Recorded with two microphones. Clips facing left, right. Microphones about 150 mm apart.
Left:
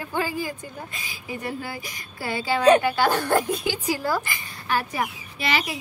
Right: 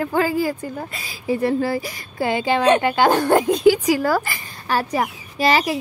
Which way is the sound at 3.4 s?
90° right.